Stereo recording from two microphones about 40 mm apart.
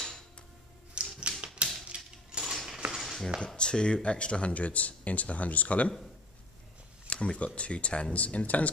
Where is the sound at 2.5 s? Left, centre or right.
Centre.